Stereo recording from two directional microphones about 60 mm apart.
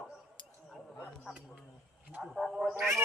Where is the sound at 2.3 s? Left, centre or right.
Centre.